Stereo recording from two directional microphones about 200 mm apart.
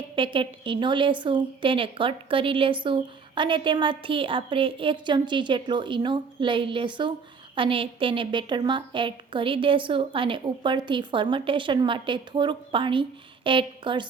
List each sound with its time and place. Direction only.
0.2 s a woman's voice: 25° right (ahead or behind)